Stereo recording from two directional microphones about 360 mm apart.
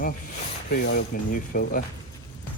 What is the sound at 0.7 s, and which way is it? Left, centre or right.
Speech, left.